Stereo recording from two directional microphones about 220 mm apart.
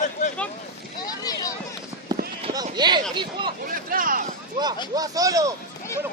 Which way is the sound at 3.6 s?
40° right (ahead or behind).